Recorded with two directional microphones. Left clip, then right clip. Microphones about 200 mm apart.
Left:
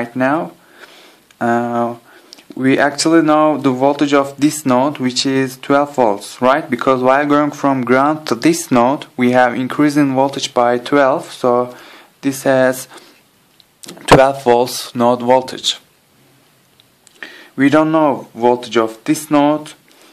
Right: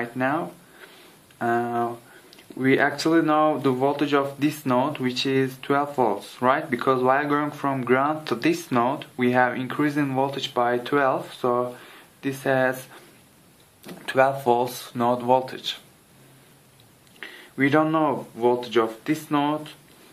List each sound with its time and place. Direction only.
0.0 s speech: 45° left (ahead or behind)
17.2 s speech: 45° left (ahead or behind)